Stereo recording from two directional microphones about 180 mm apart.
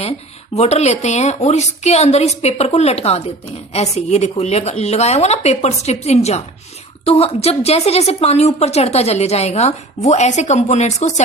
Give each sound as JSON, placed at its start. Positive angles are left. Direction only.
{"t": 0.5, "sound": "a woman's voice", "side_deg": 35}